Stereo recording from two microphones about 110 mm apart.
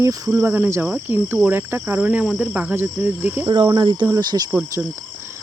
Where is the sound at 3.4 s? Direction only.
40° right (ahead or behind).